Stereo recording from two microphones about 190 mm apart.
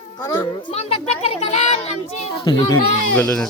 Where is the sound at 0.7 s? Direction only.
35° left (ahead or behind).